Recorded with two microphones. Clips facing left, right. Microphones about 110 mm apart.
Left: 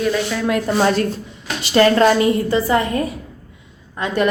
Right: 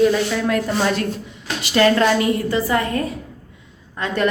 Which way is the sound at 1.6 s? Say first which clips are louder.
Left 3 dB; 35° left (ahead or behind).